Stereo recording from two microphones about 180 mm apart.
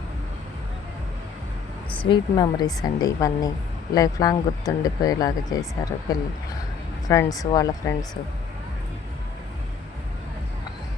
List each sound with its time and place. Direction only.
2.0 s speech: 25° left (ahead or behind)